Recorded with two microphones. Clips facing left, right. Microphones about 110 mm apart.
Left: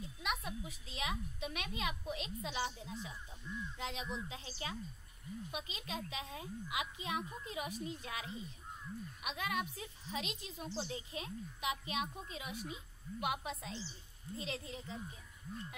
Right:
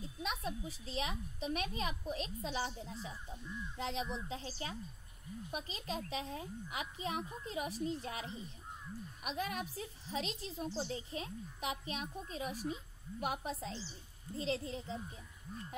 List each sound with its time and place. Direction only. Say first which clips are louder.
0.8 s a woman's voice: right 2 dB; 35° right (ahead or behind)